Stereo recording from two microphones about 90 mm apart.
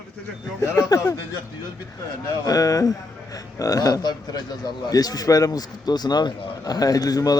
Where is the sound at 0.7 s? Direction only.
40° left (ahead or behind).